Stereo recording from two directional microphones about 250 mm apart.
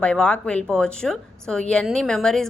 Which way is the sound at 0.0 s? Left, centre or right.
Centre.